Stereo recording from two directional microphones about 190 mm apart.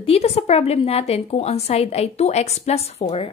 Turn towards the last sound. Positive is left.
turn(degrees=30)  # may be behind; listen again after turning